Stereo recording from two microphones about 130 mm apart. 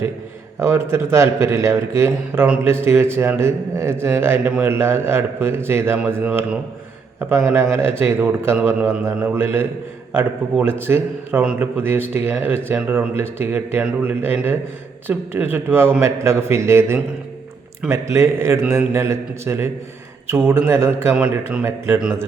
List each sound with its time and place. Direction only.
0.6 s a man's voice: 20° right (ahead or behind)